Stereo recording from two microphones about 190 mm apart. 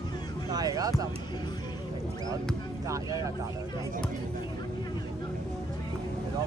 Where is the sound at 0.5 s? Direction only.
20° right (ahead or behind).